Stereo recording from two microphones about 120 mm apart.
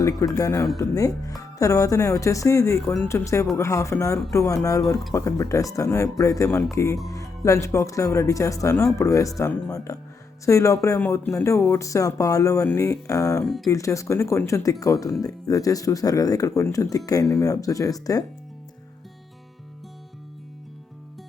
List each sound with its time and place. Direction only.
0.0 s a man's voice: 30° left (ahead or behind)
13.4 s speech: centre (ahead or behind)
13.7 s speech: 25° left (ahead or behind)